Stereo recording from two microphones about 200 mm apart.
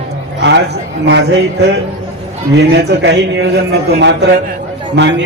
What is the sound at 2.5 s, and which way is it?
A man's voice, 60° right (ahead or behind).